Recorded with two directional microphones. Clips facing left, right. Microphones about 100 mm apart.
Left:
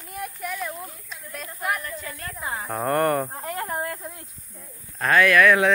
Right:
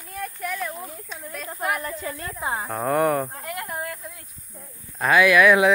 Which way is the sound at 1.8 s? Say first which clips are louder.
Right 4 dB; 30° right (ahead or behind).